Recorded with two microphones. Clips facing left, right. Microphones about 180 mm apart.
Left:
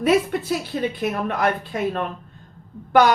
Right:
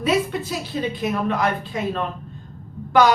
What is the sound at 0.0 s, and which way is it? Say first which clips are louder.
A woman's voice: left 2 dB; 55° left (ahead or behind).